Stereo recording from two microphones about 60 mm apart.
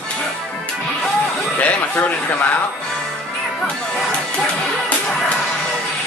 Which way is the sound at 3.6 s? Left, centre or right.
Centre.